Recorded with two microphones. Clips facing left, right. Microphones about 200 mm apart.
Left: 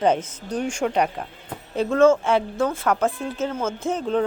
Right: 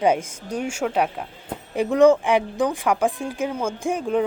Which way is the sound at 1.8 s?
15° right (ahead or behind).